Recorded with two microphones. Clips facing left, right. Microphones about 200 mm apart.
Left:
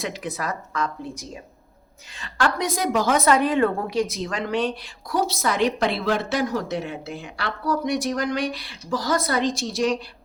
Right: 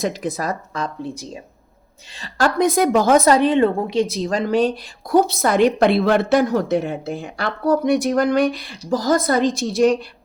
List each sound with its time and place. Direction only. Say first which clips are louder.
0.0 s speech: right 6 dB; 40° right (ahead or behind)
2.6 s a woman's voice: right 7 dB; 55° right (ahead or behind)
3.2 s a woman's voice: right 4 dB; 30° right (ahead or behind); by 10.0 s 55° right (ahead or behind)